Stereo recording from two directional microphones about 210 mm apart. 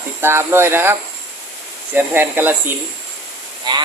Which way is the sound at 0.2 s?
10° right (ahead or behind).